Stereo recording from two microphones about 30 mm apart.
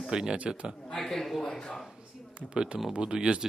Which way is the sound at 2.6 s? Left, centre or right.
Right.